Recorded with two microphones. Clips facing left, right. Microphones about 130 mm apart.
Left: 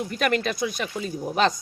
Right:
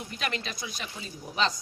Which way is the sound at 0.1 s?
55° left (ahead or behind).